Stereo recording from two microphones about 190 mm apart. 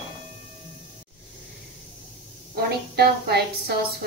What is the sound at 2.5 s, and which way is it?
A woman's voice, 55° right (ahead or behind).